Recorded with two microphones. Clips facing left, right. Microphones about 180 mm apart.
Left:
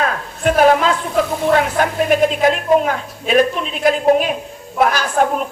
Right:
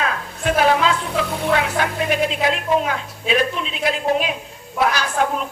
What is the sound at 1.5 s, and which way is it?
A woman's voice, 45° left (ahead or behind).